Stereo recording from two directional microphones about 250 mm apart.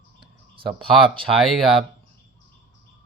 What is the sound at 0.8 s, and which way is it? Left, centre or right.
Speech, centre.